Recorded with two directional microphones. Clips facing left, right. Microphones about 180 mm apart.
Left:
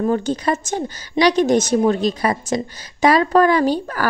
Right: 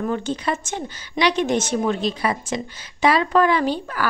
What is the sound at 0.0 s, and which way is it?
A woman's voice, 40° left (ahead or behind).